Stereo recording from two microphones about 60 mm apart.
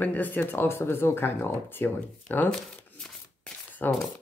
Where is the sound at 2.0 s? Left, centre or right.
Left.